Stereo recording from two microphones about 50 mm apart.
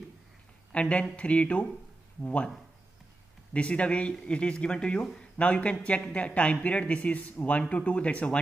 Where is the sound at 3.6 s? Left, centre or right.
Left.